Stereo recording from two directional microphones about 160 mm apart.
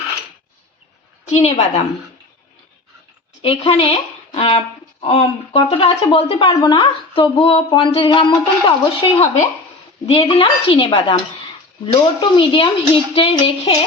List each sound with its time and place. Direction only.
1.3 s a woman's voice: 40° left (ahead or behind)
3.4 s speech: 40° left (ahead or behind)